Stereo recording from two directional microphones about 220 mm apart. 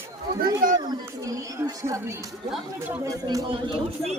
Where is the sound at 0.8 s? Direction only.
15° right (ahead or behind).